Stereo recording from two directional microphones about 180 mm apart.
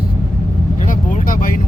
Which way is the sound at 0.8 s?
45° left (ahead or behind).